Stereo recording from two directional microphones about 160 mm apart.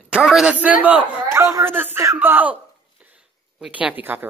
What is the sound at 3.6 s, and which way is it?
Speech, 10° right (ahead or behind).